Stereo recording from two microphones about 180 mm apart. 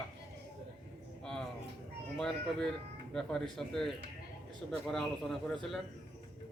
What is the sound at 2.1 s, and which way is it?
A man's voice, 5° left (ahead or behind).